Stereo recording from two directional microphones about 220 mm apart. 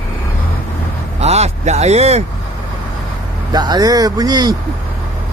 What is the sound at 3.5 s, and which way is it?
Speech, 20° right (ahead or behind).